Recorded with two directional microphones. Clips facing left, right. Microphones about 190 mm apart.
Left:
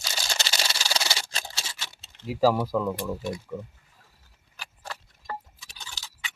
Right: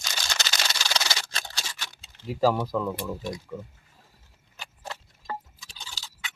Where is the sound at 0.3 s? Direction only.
30° left (ahead or behind).